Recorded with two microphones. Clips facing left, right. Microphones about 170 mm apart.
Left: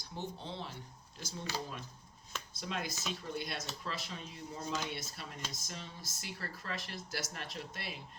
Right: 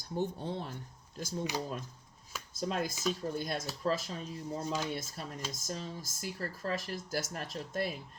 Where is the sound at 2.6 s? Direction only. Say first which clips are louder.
Right 7 dB; 45° right (ahead or behind).